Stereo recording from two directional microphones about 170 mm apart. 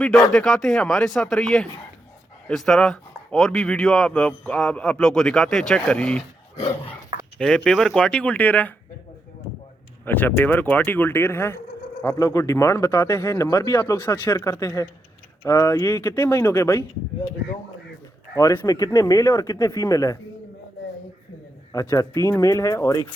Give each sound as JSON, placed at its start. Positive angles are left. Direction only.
{"t": 0.3, "sound": "speech", "side_deg": 0}
{"t": 7.3, "sound": "speech", "side_deg": 5}
{"t": 10.1, "sound": "speech", "side_deg": 10}
{"t": 18.3, "sound": "speech", "side_deg": 20}
{"t": 21.7, "sound": "speech", "side_deg": 20}